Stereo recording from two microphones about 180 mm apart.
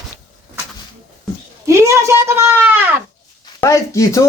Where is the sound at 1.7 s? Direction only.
15° right (ahead or behind).